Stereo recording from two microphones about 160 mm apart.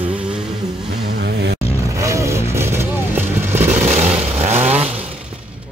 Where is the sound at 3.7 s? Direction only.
50° right (ahead or behind).